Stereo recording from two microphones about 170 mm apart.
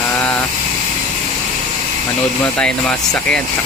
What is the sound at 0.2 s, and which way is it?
Vehicle, 10° left (ahead or behind).